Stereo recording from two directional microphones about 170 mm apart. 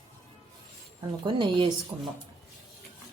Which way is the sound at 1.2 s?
30° right (ahead or behind).